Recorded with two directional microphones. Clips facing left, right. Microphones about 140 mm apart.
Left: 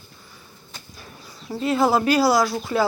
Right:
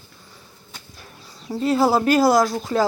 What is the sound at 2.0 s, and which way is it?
Speech, 45° right (ahead or behind).